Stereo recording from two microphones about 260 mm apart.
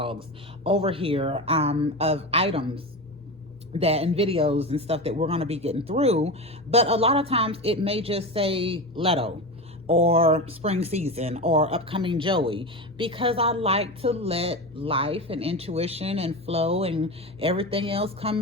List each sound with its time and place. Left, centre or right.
0.6 s speech: right